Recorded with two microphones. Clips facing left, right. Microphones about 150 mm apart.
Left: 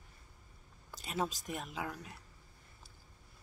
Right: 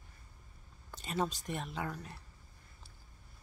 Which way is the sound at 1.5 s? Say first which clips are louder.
Right 2 dB; centre (ahead or behind).